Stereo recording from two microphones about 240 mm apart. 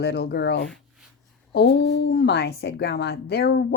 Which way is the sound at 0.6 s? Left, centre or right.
Centre.